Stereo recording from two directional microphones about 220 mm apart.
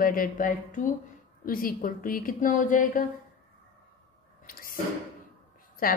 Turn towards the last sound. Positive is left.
turn(degrees=40)  # may be behind; listen again after turning